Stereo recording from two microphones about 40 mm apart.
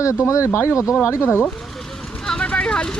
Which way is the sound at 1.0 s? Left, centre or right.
Left.